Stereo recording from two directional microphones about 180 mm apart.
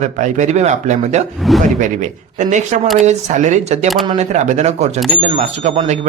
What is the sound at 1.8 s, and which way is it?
Speech, 40° right (ahead or behind).